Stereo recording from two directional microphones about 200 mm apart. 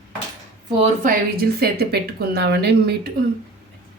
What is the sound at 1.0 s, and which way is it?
Speech, 45° right (ahead or behind).